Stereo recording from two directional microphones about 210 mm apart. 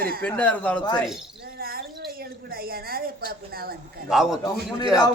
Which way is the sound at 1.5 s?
45° right (ahead or behind).